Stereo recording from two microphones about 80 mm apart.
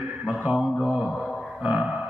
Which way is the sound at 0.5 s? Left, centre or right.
Centre.